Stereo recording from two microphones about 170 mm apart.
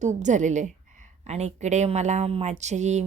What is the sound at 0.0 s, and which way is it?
Speech, 45° right (ahead or behind).